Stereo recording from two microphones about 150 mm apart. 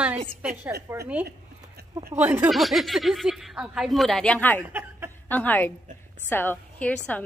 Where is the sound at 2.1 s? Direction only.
10° right (ahead or behind).